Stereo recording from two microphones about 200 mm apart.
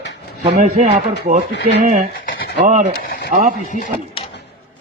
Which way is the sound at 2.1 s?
50° left (ahead or behind).